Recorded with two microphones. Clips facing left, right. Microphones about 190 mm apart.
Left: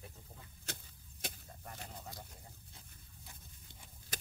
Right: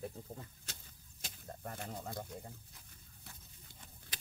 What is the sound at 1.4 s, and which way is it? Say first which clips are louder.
Speech: right 6 dB; 55° right (ahead or behind).